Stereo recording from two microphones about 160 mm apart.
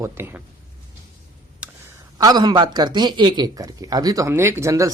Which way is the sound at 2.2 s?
25° right (ahead or behind).